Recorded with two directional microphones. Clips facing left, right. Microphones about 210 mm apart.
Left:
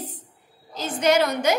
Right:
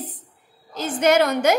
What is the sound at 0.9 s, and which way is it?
Speech, 55° right (ahead or behind).